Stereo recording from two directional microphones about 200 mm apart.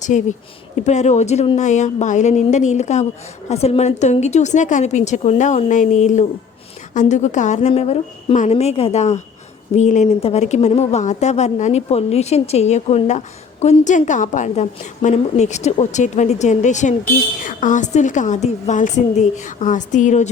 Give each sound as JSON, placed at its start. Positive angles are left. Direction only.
{"t": 0.0, "sound": "a woman's voice", "side_deg": 35}